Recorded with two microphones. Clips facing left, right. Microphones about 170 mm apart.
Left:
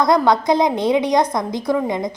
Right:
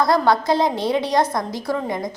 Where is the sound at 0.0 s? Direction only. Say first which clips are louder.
Left 2 dB; 20° left (ahead or behind).